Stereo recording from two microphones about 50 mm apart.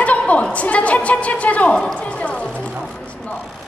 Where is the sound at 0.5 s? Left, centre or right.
Left.